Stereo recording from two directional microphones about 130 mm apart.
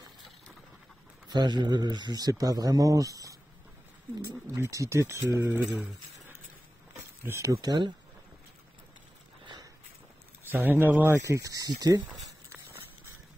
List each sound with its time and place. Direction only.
1.3 s speech: 35° right (ahead or behind)
4.6 s speech: 25° right (ahead or behind)
7.2 s speech: 20° right (ahead or behind)
10.5 s speech: 15° right (ahead or behind)